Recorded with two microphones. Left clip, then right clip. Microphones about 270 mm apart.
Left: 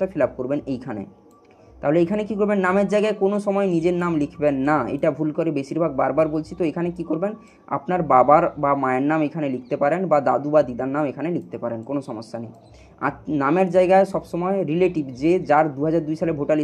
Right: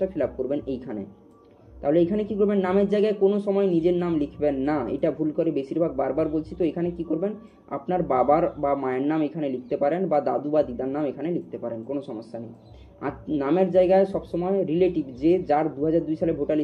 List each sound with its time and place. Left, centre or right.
0.0 s speech: left
1.8 s speech: left